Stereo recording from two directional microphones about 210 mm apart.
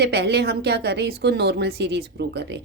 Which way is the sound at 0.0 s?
50° right (ahead or behind).